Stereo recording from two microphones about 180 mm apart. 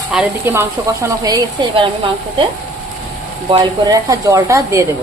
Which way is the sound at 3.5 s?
25° right (ahead or behind).